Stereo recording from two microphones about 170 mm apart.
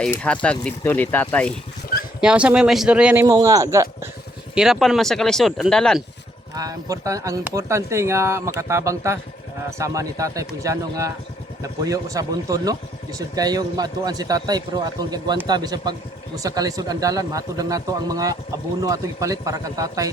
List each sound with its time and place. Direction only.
0.0 s speech: 5° left (ahead or behind)
2.2 s speech: 5° right (ahead or behind)
3.2 s speech: 20° right (ahead or behind)
4.5 s speech: centre (ahead or behind)
6.5 s speech: 20° right (ahead or behind)